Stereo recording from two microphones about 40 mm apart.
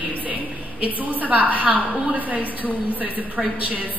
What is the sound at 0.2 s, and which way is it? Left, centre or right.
A woman's voice, right.